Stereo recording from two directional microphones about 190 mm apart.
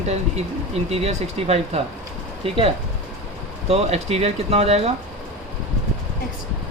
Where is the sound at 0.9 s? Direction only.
35° right (ahead or behind).